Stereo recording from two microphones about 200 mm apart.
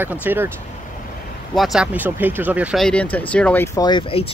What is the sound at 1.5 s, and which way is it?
Speech, centre (ahead or behind).